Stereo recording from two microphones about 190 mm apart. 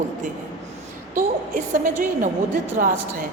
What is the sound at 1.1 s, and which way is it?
A woman's voice, 45° right (ahead or behind).